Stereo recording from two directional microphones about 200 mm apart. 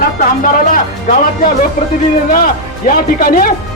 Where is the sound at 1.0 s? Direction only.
40° left (ahead or behind).